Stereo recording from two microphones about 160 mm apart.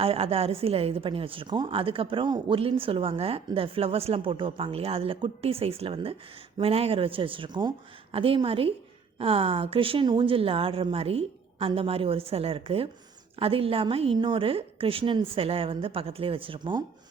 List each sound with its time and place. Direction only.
0.0 s a woman's voice: 35° right (ahead or behind)